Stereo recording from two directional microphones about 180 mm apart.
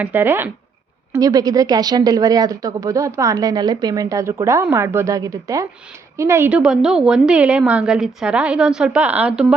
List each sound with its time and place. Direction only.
0.0 s a woman's voice: 10° right (ahead or behind)